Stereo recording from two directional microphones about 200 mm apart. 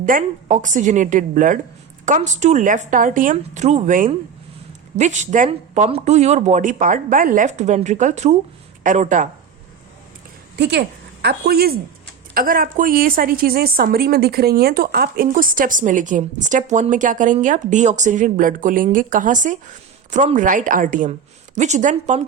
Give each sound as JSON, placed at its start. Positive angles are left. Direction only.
{"t": 0.0, "sound": "speech", "side_deg": -40}
{"t": 10.6, "sound": "a woman's voice", "side_deg": -55}